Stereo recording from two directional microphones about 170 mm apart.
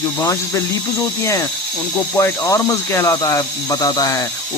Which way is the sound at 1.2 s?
20° left (ahead or behind).